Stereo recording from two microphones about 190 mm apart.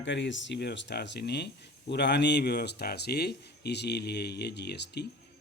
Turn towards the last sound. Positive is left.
turn(degrees=60)  # may be behind; listen again after turning